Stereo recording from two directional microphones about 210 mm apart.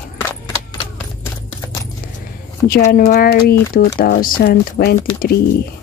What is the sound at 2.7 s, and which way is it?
Speech, 40° left (ahead or behind).